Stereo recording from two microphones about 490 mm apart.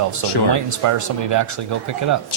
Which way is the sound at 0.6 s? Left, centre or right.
Right.